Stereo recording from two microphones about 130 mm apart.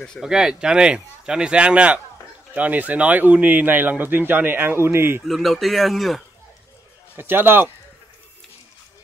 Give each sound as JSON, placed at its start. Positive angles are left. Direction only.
{"t": 0.2, "sound": "speech", "side_deg": -5}
{"t": 5.3, "sound": "speech", "side_deg": 0}
{"t": 7.2, "sound": "speech", "side_deg": -15}